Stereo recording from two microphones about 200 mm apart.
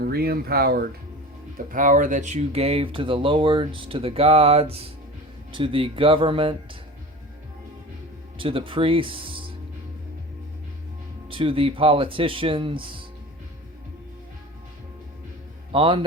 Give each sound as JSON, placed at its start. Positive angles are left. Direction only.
{"t": 0.0, "sound": "speech", "side_deg": -50}
{"t": 8.4, "sound": "speech", "side_deg": -25}
{"t": 11.3, "sound": "speech", "side_deg": -25}
{"t": 15.7, "sound": "speech", "side_deg": -25}